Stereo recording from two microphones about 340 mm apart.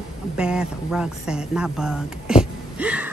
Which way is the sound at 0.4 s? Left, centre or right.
Centre.